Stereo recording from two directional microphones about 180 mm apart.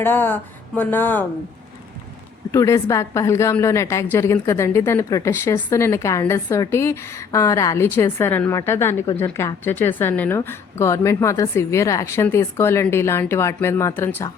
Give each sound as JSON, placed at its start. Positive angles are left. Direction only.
{"t": 0.0, "sound": "a woman's voice", "side_deg": 10}
{"t": 2.5, "sound": "a woman's voice", "side_deg": 15}